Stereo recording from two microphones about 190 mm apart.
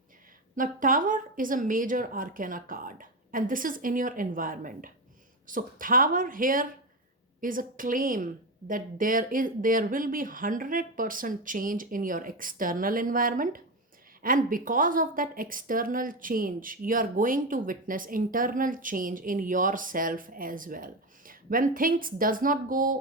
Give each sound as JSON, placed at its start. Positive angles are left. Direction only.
{"t": 0.5, "sound": "a woman's voice", "side_deg": -45}